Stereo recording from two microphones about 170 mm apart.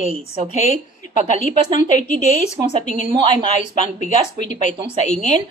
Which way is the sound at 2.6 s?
30° right (ahead or behind).